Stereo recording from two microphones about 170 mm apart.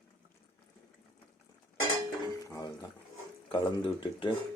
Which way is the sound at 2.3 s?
20° left (ahead or behind).